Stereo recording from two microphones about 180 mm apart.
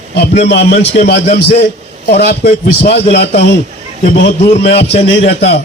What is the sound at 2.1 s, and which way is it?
A man's voice, 60° left (ahead or behind).